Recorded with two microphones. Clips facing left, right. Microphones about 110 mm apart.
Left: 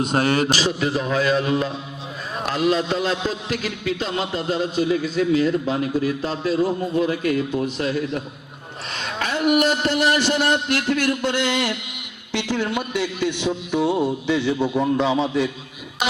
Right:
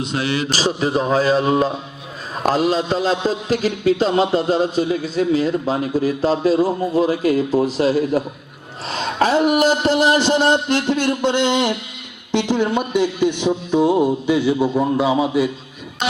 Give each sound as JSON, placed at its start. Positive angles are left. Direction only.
{"t": 0.0, "sound": "a man's voice", "side_deg": 45}
{"t": 0.5, "sound": "a man's voice", "side_deg": -35}